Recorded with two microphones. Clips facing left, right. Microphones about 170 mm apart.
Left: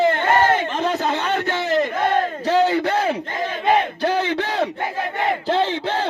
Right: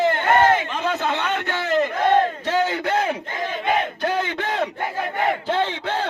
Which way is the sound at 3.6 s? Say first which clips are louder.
Left 4 dB; 35° left (ahead or behind).